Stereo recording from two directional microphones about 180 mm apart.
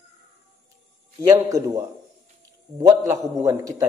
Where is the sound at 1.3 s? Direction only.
20° right (ahead or behind).